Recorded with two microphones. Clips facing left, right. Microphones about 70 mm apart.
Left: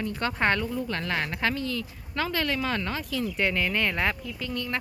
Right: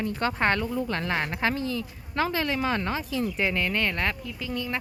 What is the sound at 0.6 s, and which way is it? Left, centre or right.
Speech, right.